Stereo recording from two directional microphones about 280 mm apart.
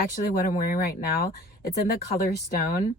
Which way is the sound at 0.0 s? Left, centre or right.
Left.